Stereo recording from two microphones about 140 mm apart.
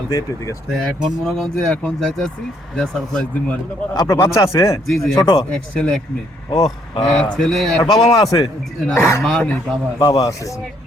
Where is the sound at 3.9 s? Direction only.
25° left (ahead or behind).